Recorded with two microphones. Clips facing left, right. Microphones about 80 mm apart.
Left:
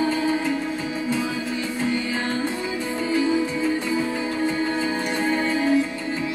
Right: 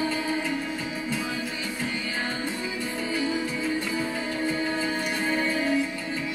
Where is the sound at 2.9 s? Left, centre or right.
Left.